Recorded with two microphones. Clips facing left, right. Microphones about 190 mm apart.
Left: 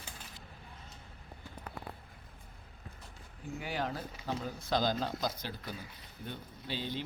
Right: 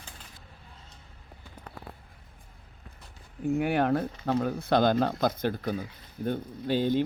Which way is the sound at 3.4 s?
60° right (ahead or behind).